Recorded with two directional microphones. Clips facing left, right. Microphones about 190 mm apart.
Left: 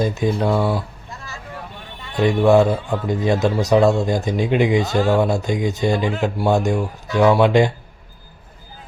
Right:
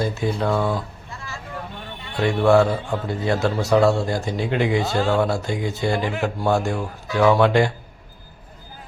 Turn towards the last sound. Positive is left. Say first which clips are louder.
# left 2 dB
turn(degrees=20)  # may be behind; listen again after turning